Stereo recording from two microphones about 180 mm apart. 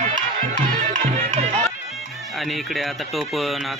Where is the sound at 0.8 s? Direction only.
40° right (ahead or behind).